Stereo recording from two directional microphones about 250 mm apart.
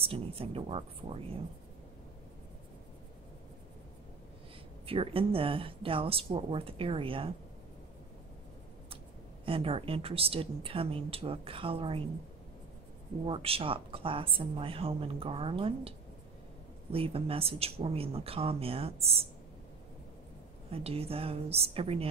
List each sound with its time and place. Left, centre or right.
0.0 s a woman's voice: right
4.8 s a woman's voice: right
9.4 s a woman's voice: right
13.3 s a woman's voice: right
16.9 s a woman's voice: right
20.7 s a woman's voice: right